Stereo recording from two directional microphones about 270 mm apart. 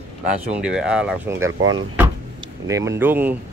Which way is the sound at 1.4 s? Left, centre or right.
Right.